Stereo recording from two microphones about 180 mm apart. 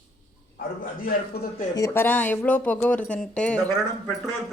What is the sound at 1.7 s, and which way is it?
Speech, 15° left (ahead or behind).